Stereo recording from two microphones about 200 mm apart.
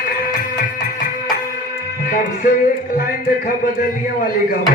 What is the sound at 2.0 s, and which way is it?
Music, 40° left (ahead or behind).